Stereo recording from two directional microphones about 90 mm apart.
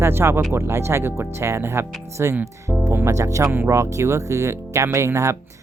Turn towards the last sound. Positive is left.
turn(degrees=-35)  # may be behind; listen again after turning